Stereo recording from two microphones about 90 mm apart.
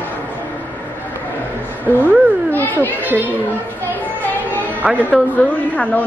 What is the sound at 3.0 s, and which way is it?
Speech, 20° right (ahead or behind).